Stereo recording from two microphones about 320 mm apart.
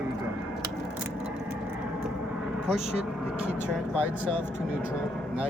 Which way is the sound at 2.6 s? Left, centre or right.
Centre.